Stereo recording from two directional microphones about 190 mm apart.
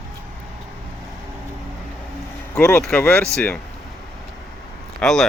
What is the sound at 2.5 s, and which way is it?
Speech, 5° left (ahead or behind).